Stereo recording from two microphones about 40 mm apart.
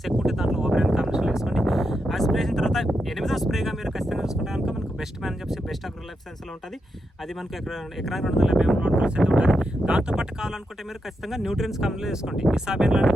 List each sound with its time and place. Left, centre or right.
0.1 s speech: centre
0.9 s a sound: centre
7.3 s speech: centre
8.4 s speech: centre